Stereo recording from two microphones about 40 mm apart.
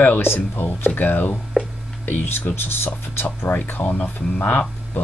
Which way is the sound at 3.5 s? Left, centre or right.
Left.